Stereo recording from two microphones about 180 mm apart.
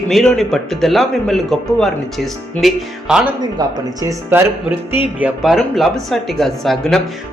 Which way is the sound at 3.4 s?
20° right (ahead or behind).